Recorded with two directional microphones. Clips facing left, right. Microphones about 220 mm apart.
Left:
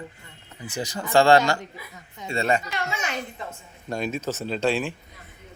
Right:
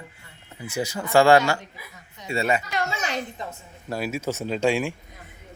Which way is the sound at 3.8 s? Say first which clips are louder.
Even; 5° right (ahead or behind).